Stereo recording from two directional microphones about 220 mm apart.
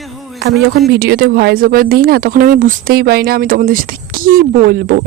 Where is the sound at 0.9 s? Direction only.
45° right (ahead or behind).